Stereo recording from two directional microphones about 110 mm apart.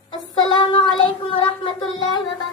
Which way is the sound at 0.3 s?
50° left (ahead or behind).